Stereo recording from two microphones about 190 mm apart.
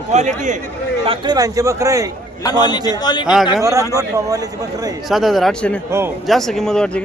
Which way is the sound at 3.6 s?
15° right (ahead or behind).